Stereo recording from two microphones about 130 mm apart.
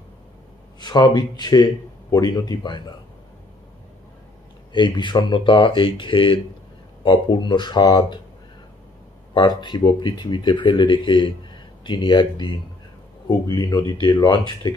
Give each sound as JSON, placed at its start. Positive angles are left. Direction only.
{"t": 0.7, "sound": "speech", "side_deg": 35}
{"t": 4.7, "sound": "speech", "side_deg": 35}
{"t": 9.6, "sound": "speech", "side_deg": 35}